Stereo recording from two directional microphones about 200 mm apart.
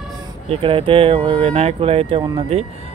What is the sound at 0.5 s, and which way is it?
Speech, 25° right (ahead or behind).